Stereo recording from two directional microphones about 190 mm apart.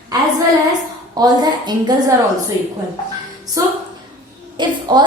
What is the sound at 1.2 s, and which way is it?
Speech, 20° right (ahead or behind).